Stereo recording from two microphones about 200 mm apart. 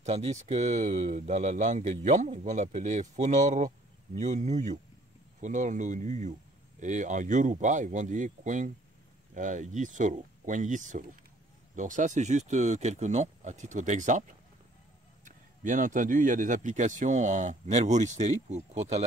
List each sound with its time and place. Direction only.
0.0 s speech: 30° right (ahead or behind)
15.2 s speech: 40° right (ahead or behind)